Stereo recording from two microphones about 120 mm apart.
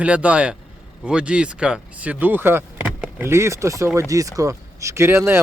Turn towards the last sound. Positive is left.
turn(degrees=-20)  # may be behind; listen again after turning